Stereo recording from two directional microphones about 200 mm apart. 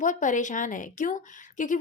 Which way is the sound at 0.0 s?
40° left (ahead or behind).